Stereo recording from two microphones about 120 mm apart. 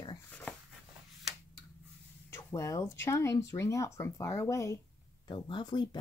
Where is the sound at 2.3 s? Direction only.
20° left (ahead or behind).